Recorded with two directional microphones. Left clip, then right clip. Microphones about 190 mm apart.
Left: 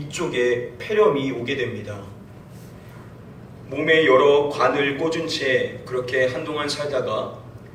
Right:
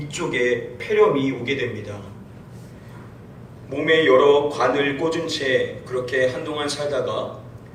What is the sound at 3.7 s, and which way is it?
A man's voice, 30° right (ahead or behind).